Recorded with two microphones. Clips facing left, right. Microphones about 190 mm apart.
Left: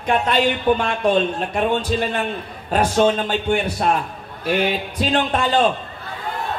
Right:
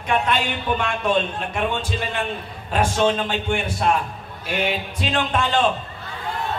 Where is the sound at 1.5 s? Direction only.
45° left (ahead or behind).